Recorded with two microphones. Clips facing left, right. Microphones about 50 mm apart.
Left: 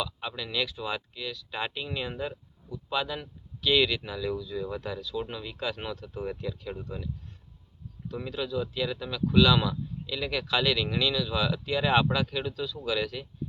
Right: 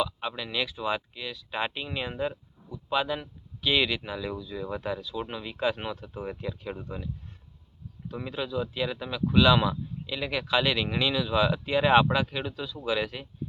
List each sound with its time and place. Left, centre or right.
0.0 s speech: centre